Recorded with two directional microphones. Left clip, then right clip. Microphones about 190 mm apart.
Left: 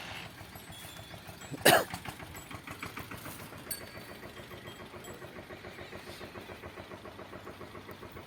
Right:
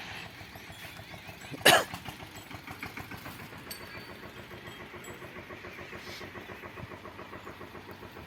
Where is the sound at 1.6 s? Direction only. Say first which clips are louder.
Right 2 dB; 30° left (ahead or behind).